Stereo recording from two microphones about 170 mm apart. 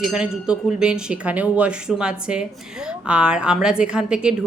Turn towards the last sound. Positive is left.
turn(degrees=-5)  # may be behind; listen again after turning